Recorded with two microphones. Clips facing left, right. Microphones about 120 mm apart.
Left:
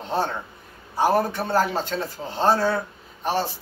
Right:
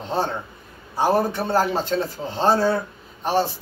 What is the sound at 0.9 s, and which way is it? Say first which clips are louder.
Speech: right 1 dB; 25° right (ahead or behind).